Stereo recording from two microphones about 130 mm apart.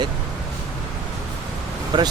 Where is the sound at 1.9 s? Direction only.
35° right (ahead or behind).